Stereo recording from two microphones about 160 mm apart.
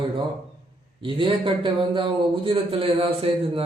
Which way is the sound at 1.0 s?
30° right (ahead or behind).